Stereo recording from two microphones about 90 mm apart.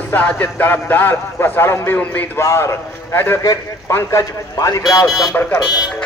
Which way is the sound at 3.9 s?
40° left (ahead or behind).